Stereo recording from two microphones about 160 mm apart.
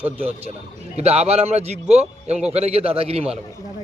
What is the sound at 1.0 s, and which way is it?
A man's voice, 40° right (ahead or behind).